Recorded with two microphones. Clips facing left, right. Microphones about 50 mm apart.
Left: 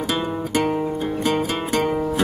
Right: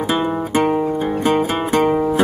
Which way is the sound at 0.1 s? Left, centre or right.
Centre.